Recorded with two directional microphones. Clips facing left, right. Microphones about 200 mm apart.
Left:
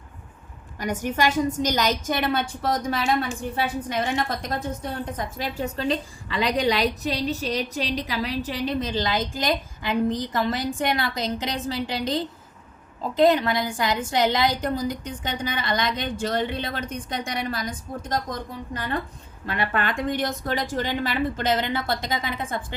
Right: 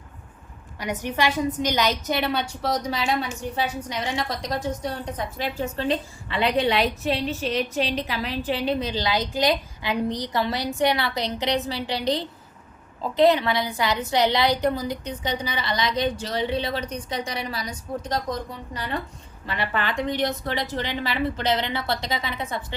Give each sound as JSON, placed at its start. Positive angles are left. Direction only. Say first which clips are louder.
{"t": 0.8, "sound": "a woman's voice", "louder": "left 1 dB", "side_deg": 45}
{"t": 5.6, "sound": "a woman's voice", "louder": "even", "side_deg": 35}